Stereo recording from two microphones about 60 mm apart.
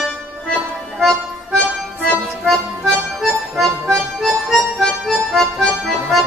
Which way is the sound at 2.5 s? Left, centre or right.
Centre.